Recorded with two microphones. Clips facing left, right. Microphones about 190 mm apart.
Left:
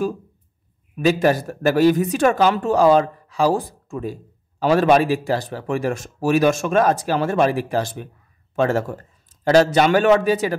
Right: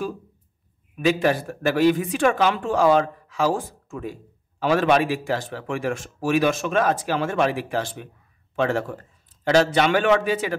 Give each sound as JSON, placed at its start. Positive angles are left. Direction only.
{"t": 1.0, "sound": "speech", "side_deg": 40}